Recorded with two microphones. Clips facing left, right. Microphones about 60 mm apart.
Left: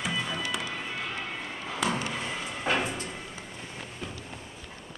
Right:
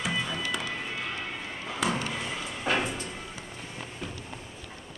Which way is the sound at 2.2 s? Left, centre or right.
Centre.